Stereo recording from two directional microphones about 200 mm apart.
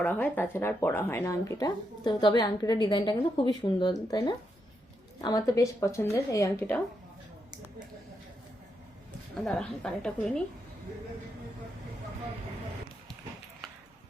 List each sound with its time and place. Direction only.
0.0 s speech: 10° left (ahead or behind)
9.4 s a woman's voice: 5° left (ahead or behind)